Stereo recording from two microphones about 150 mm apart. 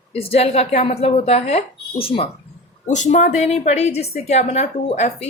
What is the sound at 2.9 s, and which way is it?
Speech, 50° left (ahead or behind).